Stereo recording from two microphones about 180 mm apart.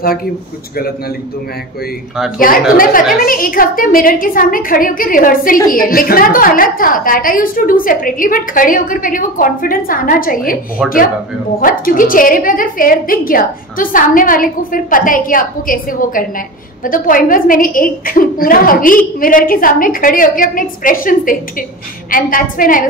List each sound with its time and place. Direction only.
0.0 s speech: 55° left (ahead or behind)
2.3 s a woman's voice: 50° left (ahead or behind)
10.8 s speech: 5° right (ahead or behind)
11.6 s a woman's voice: 50° left (ahead or behind)